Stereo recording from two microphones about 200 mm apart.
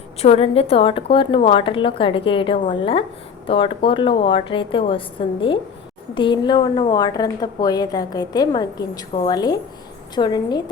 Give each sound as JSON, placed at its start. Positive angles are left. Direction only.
{"t": 0.2, "sound": "a woman's voice", "side_deg": 30}